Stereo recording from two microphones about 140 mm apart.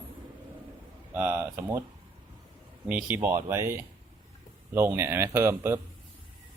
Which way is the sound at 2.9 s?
10° right (ahead or behind).